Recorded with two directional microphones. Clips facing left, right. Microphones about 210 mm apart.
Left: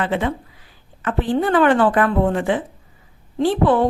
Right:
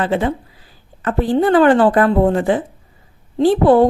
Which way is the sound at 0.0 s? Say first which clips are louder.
Right 3 dB; 35° right (ahead or behind).